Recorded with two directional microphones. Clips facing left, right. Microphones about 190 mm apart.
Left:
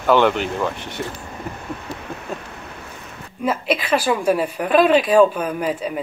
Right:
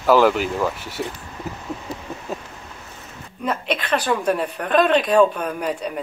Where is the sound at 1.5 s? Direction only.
5° right (ahead or behind).